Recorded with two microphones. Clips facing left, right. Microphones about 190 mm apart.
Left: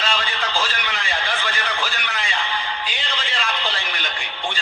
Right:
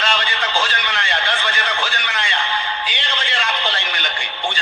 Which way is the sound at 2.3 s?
75° right (ahead or behind).